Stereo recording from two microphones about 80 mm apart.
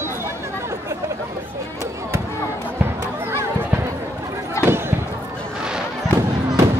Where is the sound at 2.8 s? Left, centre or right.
Right.